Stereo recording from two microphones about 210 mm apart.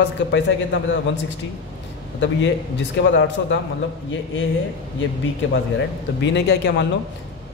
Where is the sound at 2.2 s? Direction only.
60° left (ahead or behind).